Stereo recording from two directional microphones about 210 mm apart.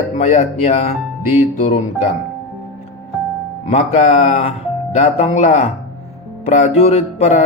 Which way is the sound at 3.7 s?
30° left (ahead or behind).